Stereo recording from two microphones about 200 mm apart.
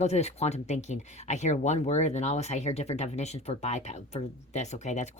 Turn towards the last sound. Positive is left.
turn(degrees=35)  # may be behind; listen again after turning